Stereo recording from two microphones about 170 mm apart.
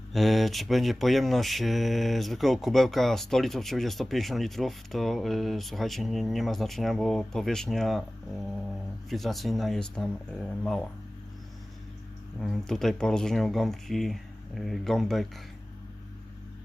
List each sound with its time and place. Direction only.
0.1 s speech: centre (ahead or behind)
9.0 s speech: centre (ahead or behind)
12.4 s speech: centre (ahead or behind)